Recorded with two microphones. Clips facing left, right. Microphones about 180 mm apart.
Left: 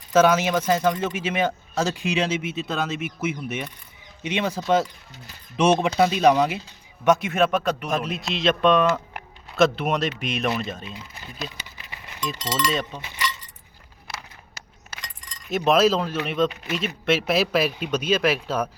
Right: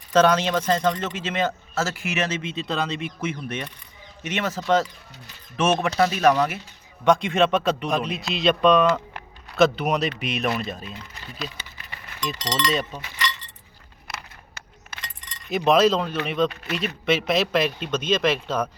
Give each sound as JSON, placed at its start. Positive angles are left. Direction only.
{"t": 0.1, "sound": "speech", "side_deg": 5}
{"t": 7.0, "sound": "speech", "side_deg": 5}
{"t": 11.9, "sound": "chink", "side_deg": 5}
{"t": 12.9, "sound": "speech", "side_deg": -10}
{"t": 14.9, "sound": "speech", "side_deg": 0}